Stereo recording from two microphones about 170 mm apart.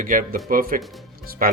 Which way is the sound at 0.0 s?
50° right (ahead or behind).